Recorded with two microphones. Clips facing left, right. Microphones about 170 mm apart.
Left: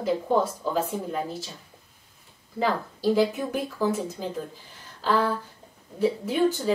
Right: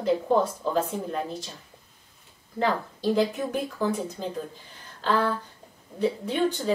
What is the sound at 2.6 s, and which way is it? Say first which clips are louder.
Speech: even; 5° left (ahead or behind).